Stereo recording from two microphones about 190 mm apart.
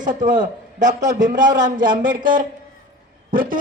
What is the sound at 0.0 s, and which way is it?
Speech, 40° right (ahead or behind).